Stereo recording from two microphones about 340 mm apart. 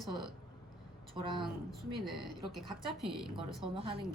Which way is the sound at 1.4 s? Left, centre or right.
Centre.